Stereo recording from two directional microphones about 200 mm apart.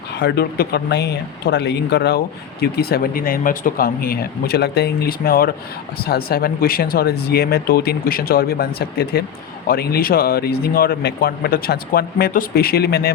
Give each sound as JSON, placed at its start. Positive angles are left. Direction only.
{"t": 0.2, "sound": "speech", "side_deg": 55}